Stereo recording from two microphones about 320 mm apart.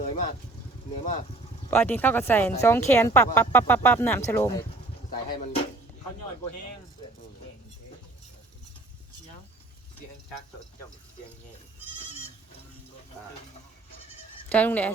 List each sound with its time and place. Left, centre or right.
0.0 s vehicle: centre
1.7 s speech: centre
14.5 s speech: centre